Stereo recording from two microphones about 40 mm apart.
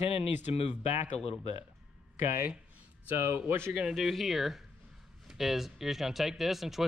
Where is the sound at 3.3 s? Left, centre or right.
Right.